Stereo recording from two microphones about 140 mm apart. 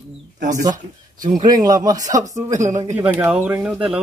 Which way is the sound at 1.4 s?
25° right (ahead or behind).